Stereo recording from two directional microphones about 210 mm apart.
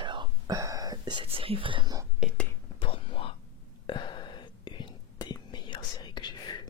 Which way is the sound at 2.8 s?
25° left (ahead or behind).